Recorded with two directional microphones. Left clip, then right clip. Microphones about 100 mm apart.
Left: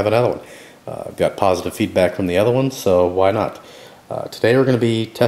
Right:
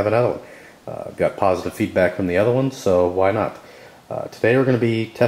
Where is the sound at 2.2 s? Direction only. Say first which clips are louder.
Left 2 dB; 15° left (ahead or behind).